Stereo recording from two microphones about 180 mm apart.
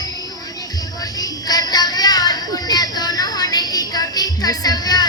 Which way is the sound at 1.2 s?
20° left (ahead or behind).